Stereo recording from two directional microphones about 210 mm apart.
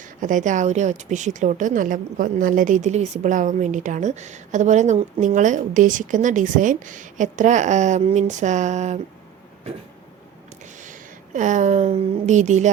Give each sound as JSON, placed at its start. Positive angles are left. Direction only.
{"t": 0.0, "sound": "speech", "side_deg": -40}
{"t": 11.3, "sound": "speech", "side_deg": -35}